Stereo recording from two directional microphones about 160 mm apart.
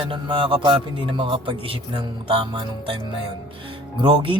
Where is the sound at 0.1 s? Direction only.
35° right (ahead or behind).